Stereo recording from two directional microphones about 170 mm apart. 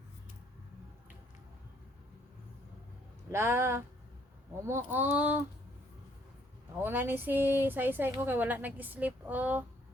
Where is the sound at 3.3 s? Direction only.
15° right (ahead or behind).